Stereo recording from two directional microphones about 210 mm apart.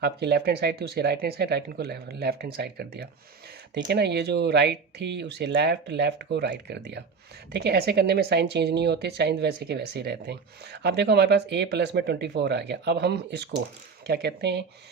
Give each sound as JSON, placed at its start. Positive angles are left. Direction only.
{"t": 0.0, "sound": "a woman's voice", "side_deg": -50}